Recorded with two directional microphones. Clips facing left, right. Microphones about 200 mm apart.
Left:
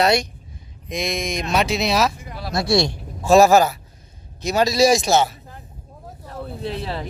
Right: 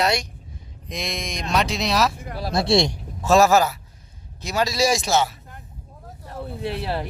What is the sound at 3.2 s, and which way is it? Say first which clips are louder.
A man's voice: left 3 dB; 10° left (ahead or behind).